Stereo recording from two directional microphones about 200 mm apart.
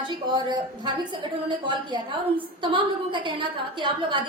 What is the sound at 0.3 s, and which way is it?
A woman's voice, 20° right (ahead or behind).